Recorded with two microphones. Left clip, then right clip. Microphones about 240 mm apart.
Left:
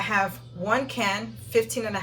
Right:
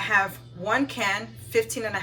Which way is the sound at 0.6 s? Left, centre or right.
Right.